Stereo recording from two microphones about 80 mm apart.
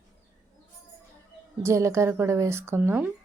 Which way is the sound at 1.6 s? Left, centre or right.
Right.